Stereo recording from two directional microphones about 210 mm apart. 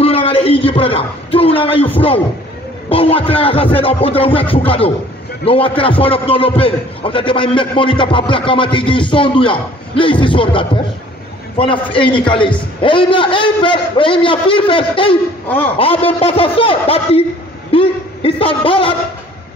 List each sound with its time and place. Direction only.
0.0 s a man's voice: 25° left (ahead or behind)
15.4 s a man's voice: 10° left (ahead or behind)
15.8 s a man's voice: 25° left (ahead or behind)